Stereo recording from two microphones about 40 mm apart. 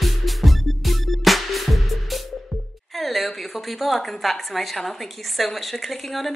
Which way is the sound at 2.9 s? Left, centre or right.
Centre.